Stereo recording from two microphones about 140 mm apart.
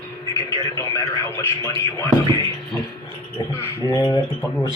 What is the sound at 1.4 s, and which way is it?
Speech, 25° left (ahead or behind).